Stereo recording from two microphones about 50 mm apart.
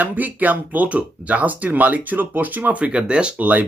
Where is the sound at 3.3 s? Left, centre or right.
Right.